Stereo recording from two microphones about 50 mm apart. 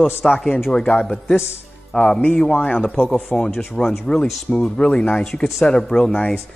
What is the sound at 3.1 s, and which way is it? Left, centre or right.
A man's voice, centre.